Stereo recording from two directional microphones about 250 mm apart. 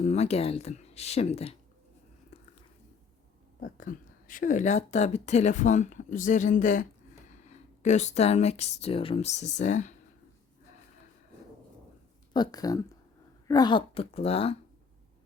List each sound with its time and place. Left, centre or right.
0.0 s speech: left
3.6 s speech: left
12.3 s speech: centre